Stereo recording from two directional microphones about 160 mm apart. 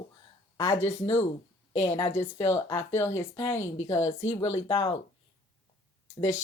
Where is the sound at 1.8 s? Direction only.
20° left (ahead or behind).